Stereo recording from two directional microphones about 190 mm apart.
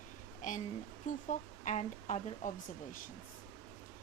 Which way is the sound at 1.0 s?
40° left (ahead or behind).